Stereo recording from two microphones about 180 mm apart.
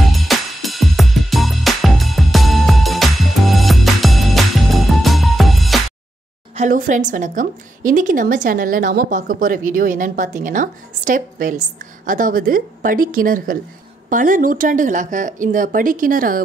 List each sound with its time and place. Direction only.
0.0 s music: centre (ahead or behind)
6.5 s a woman's voice: 40° right (ahead or behind)